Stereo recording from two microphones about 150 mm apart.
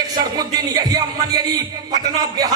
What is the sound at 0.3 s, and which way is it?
A man's voice, 25° right (ahead or behind).